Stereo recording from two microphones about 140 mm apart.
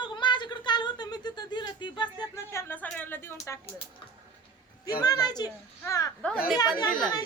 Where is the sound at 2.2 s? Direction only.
20° left (ahead or behind).